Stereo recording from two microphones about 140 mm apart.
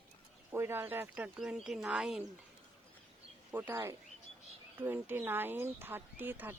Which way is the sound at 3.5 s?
15° right (ahead or behind).